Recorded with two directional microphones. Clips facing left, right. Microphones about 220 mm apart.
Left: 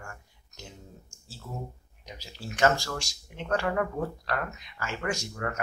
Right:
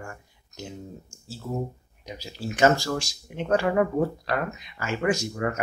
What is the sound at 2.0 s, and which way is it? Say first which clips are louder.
Speech: right 7 dB; 5° right (ahead or behind).